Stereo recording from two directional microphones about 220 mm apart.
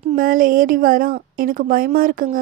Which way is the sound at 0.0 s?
40° right (ahead or behind).